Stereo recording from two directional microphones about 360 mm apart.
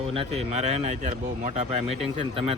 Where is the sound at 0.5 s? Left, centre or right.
Centre.